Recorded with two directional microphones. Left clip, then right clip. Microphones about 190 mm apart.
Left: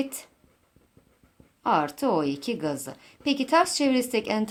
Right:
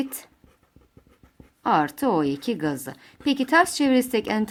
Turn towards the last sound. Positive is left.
turn(degrees=-30)  # may be behind; listen again after turning